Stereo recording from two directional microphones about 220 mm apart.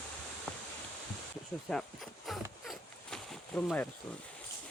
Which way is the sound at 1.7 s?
Centre (ahead or behind).